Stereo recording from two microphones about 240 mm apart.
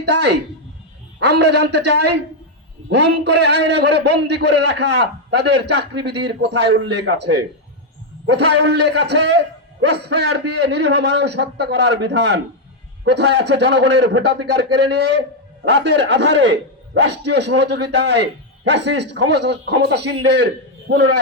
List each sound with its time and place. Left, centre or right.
0.0 s a man's voice: right